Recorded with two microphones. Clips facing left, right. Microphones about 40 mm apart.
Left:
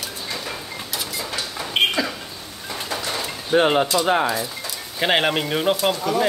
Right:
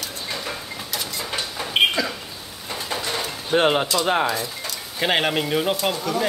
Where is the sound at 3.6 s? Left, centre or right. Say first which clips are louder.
Left 2 dB; centre.